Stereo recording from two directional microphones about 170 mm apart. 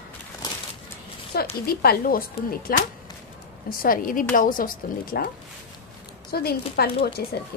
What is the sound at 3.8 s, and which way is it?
Speech, 55° left (ahead or behind).